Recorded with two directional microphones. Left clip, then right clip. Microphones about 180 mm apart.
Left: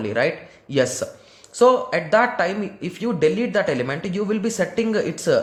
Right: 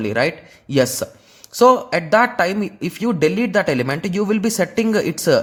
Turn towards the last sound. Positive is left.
turn(degrees=-35)  # may be behind; listen again after turning